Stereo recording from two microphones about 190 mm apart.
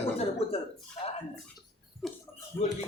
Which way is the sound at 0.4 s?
30° left (ahead or behind).